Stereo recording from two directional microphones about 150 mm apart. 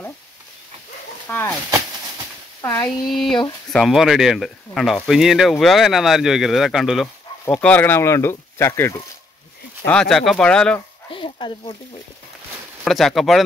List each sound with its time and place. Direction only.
1.3 s speech: 15° left (ahead or behind)
2.6 s speech: 20° left (ahead or behind)
3.1 s speech: centre (ahead or behind)
7.4 s speech: 10° left (ahead or behind)
9.8 s speech: 5° left (ahead or behind)
11.1 s a sound: 35° left (ahead or behind)
12.8 s speech: centre (ahead or behind)